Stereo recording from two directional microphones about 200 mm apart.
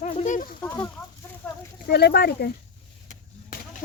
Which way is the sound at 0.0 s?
35° left (ahead or behind).